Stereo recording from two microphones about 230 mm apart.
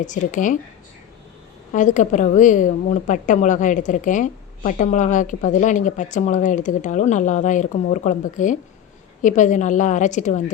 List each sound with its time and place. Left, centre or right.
0.0 s a woman's voice: left
1.7 s a woman's voice: left